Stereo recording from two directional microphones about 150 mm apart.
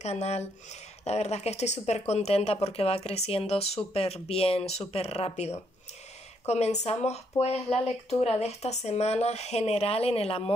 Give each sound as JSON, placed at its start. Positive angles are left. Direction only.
{"t": 0.0, "sound": "speech", "side_deg": 45}